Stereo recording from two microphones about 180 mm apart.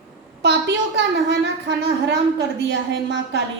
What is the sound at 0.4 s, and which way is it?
A woman's voice, 75° right (ahead or behind).